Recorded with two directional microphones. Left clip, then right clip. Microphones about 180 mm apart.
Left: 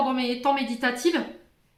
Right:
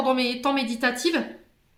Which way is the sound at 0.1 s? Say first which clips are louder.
Right 1 dB; 35° right (ahead or behind).